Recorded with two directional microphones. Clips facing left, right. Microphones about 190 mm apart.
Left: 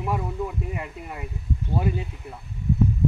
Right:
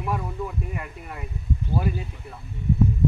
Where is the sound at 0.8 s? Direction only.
20° left (ahead or behind).